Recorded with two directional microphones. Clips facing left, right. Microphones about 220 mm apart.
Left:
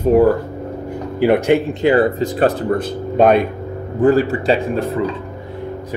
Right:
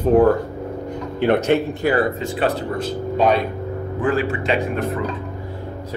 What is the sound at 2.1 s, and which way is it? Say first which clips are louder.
Speech: left 5 dB; 40° left (ahead or behind).